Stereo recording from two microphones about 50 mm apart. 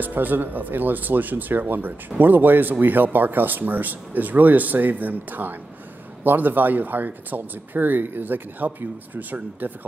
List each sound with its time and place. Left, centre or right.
0.0 s speech: right